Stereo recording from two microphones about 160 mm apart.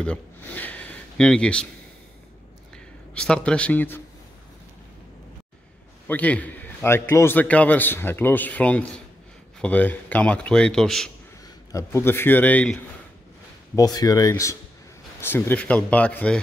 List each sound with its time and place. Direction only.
0.0 s speech: 10° left (ahead or behind)
3.2 s a man's voice: 5° left (ahead or behind)
6.0 s a man's voice: 10° left (ahead or behind)
11.7 s a man's voice: 15° left (ahead or behind)
13.7 s a man's voice: 25° left (ahead or behind)